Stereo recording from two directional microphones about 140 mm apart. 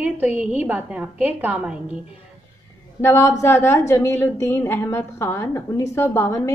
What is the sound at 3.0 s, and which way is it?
A woman's voice, 20° left (ahead or behind).